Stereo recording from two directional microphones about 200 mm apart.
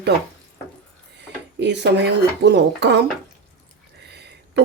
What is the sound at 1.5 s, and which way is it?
Speech, 60° right (ahead or behind).